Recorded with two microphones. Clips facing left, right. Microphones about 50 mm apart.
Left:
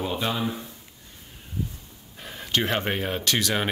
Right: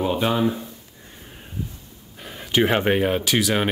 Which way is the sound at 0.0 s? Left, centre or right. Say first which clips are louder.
Right 6 dB; centre.